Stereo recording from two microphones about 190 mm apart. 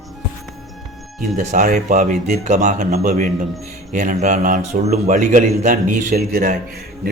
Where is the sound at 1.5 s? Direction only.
40° right (ahead or behind).